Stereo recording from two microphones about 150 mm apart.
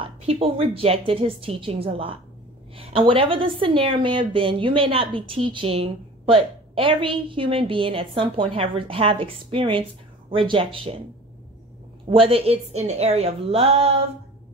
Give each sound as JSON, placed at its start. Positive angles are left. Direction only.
{"t": 0.0, "sound": "a woman's voice", "side_deg": -40}
{"t": 12.1, "sound": "a woman's voice", "side_deg": -40}